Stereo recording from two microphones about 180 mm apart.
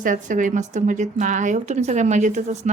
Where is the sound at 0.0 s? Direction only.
45° right (ahead or behind).